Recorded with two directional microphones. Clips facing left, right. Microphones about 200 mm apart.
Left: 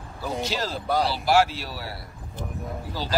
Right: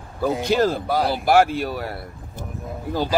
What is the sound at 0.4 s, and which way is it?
Speech, 55° right (ahead or behind).